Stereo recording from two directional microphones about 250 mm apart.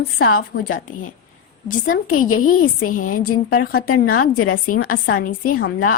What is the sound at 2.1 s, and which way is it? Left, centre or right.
Speech, left.